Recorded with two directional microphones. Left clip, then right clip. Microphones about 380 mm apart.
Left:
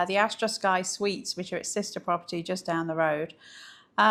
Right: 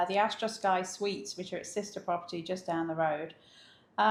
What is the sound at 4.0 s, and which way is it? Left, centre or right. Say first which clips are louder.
Quack: left 5 dB; left.